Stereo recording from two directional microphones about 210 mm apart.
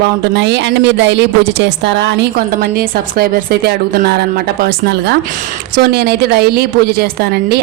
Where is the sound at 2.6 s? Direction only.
45° right (ahead or behind).